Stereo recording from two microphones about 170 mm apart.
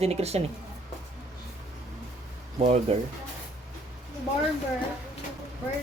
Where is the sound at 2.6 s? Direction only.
40° right (ahead or behind).